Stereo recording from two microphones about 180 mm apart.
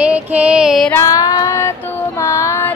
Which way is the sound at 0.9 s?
15° left (ahead or behind).